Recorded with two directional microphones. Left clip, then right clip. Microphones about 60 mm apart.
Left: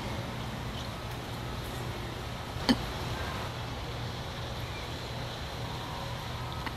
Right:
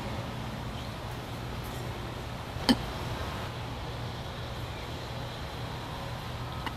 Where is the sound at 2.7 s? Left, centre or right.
Right.